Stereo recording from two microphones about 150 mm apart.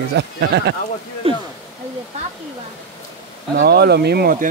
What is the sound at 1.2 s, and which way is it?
Speech, 40° right (ahead or behind).